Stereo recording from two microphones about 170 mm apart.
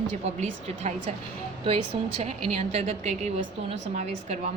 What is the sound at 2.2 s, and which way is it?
A woman's voice, 40° right (ahead or behind).